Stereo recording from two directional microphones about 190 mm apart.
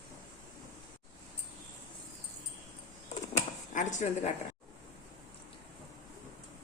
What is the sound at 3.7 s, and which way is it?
Speech, 40° left (ahead or behind).